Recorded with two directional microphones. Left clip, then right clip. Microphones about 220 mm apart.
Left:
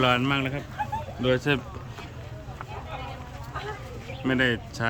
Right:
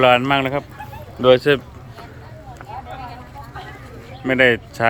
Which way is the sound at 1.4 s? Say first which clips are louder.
Right 9 dB; centre (ahead or behind).